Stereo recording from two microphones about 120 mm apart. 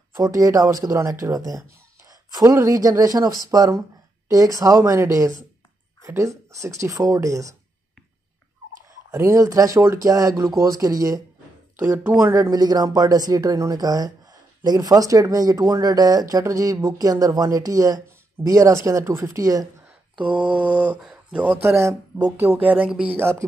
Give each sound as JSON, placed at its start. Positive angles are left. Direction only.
{"t": 0.2, "sound": "speech", "side_deg": -30}
{"t": 9.1, "sound": "speech", "side_deg": -25}
{"t": 20.2, "sound": "speech", "side_deg": -10}
{"t": 22.5, "sound": "speech", "side_deg": -10}